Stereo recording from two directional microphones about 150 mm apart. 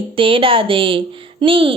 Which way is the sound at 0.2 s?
35° right (ahead or behind).